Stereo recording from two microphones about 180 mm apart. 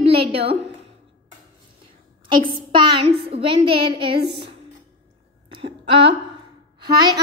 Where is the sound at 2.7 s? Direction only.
30° right (ahead or behind).